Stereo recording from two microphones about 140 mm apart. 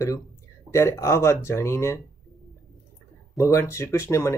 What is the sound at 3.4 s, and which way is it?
Speech, 20° left (ahead or behind).